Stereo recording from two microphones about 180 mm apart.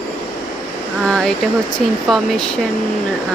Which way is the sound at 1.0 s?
Centre (ahead or behind).